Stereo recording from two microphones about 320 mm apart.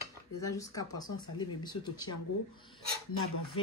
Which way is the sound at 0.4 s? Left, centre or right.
Centre.